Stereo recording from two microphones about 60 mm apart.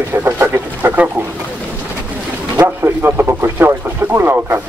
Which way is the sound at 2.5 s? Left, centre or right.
Right.